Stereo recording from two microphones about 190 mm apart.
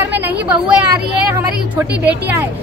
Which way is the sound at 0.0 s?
10° right (ahead or behind).